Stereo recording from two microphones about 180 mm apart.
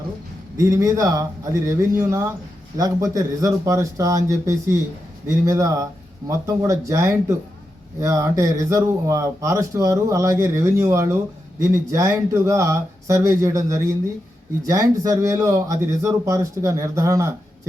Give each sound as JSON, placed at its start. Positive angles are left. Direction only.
{"t": 0.5, "sound": "speech", "side_deg": -20}